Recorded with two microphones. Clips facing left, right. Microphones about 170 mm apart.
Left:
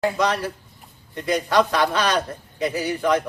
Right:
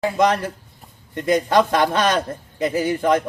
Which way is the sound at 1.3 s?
50° right (ahead or behind).